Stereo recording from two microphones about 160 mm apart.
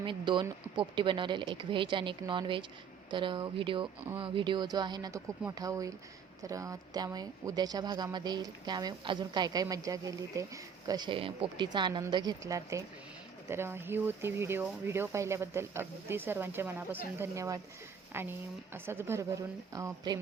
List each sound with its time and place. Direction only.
0.0 s speech: 30° right (ahead or behind)